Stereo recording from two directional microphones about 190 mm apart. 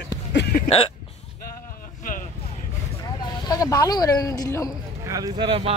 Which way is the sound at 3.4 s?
20° left (ahead or behind).